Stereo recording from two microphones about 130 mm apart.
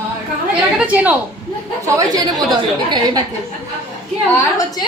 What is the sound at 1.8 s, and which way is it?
Speech, 25° right (ahead or behind).